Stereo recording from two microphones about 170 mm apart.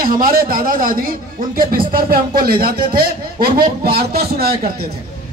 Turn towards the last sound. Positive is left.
turn(degrees=-60)  # may be behind; listen again after turning